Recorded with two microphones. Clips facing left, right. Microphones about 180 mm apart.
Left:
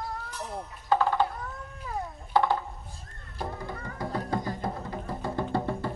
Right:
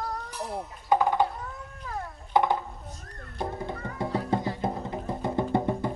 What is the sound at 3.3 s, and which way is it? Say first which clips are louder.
Music: right 3 dB; 20° right (ahead or behind).